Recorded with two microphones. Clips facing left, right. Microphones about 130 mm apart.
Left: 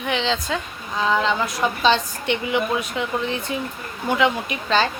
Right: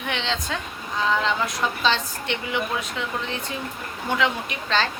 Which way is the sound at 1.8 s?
15° left (ahead or behind).